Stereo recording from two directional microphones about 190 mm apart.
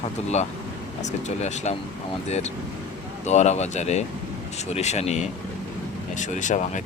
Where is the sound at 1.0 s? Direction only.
35° left (ahead or behind).